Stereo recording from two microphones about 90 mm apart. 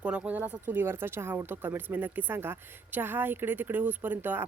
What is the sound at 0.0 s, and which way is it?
Speech, 15° right (ahead or behind).